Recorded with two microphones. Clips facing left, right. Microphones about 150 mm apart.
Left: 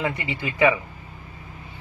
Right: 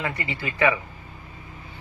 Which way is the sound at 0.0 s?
15° left (ahead or behind).